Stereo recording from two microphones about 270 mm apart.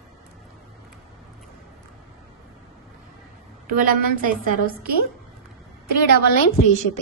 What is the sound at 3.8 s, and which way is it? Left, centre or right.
A woman's voice, right.